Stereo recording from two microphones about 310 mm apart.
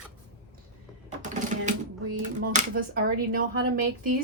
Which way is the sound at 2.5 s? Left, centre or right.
Right.